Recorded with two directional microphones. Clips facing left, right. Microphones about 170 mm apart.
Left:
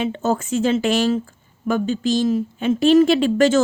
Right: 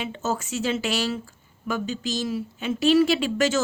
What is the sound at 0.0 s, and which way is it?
A woman's voice, 50° left (ahead or behind).